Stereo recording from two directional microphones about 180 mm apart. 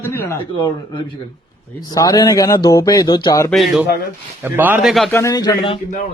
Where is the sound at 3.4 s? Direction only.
Centre (ahead or behind).